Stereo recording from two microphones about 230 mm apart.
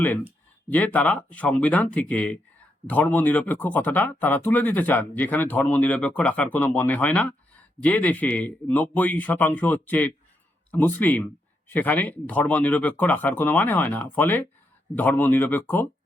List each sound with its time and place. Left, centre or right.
0.7 s speech: centre